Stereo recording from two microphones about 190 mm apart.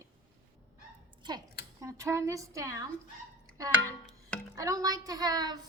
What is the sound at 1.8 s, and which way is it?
A woman's voice, 15° right (ahead or behind).